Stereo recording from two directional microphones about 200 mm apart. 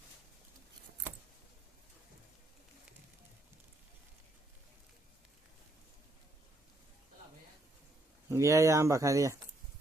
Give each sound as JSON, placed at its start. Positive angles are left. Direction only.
{"t": 8.3, "sound": "speech", "side_deg": -15}